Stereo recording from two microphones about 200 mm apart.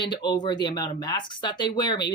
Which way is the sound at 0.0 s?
20° left (ahead or behind).